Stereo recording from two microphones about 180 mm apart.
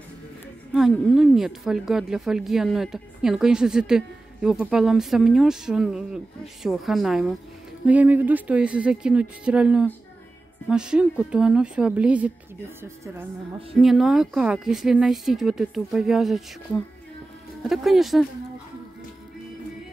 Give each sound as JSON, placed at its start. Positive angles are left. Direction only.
{"t": 0.7, "sound": "speech", "side_deg": 0}
{"t": 13.7, "sound": "speech", "side_deg": 0}